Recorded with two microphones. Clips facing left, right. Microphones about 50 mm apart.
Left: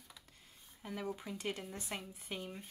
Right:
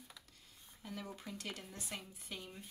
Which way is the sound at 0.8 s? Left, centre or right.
Centre.